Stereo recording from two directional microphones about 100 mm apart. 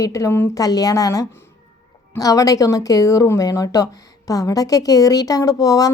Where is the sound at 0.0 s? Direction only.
30° left (ahead or behind).